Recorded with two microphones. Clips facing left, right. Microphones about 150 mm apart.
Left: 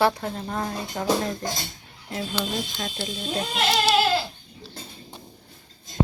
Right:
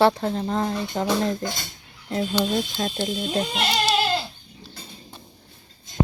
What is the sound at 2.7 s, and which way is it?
Speech, 35° right (ahead or behind).